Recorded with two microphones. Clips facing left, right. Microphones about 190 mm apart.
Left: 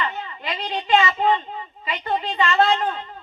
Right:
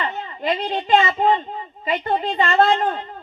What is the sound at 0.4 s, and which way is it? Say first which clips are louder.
A child's voice: right 6 dB; 50° right (ahead or behind).